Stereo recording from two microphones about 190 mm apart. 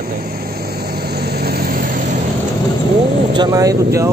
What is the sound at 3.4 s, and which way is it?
Speech, 20° right (ahead or behind).